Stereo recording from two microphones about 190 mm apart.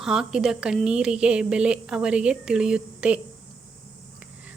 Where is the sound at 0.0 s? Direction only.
Centre (ahead or behind).